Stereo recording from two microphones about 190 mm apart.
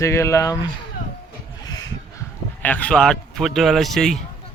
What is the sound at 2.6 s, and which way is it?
Speech, 5° left (ahead or behind).